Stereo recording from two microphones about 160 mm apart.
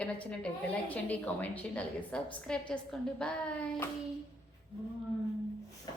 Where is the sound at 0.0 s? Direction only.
10° left (ahead or behind).